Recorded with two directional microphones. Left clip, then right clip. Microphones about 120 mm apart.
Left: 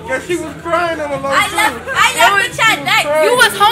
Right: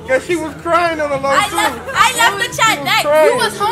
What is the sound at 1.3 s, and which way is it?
Speech, 25° right (ahead or behind).